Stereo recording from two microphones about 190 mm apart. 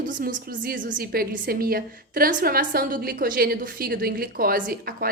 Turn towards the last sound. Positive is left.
turn(degrees=-50)  # may be behind; listen again after turning